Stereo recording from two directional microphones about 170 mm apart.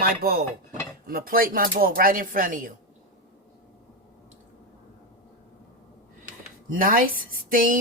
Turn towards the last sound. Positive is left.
turn(degrees=-55)  # may be behind; listen again after turning